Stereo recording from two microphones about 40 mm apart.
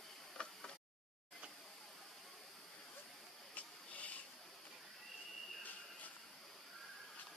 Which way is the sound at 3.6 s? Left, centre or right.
Left.